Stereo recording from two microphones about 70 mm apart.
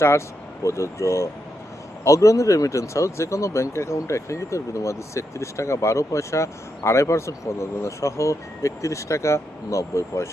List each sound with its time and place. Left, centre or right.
0.6 s speech: left